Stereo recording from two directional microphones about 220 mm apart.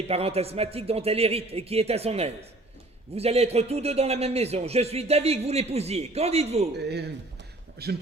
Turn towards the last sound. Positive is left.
turn(degrees=-45)  # may be behind; listen again after turning